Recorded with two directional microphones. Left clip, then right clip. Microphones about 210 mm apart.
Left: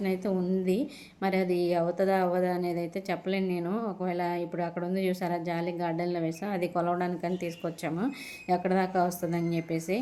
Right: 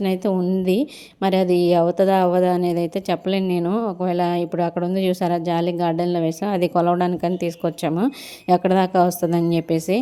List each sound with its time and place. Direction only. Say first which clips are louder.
0.0 s a woman's voice: right 9 dB; 40° right (ahead or behind)